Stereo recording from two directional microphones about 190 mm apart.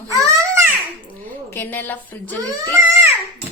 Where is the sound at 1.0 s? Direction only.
10° left (ahead or behind).